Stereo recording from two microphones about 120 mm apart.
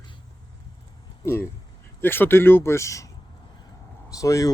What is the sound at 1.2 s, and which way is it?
Speech, 20° left (ahead or behind).